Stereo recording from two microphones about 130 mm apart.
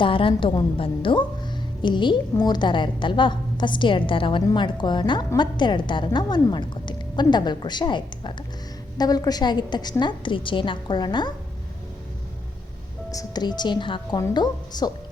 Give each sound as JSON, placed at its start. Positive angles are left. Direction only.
{"t": 0.0, "sound": "a woman's voice", "side_deg": 45}
{"t": 13.1, "sound": "a woman's voice", "side_deg": 30}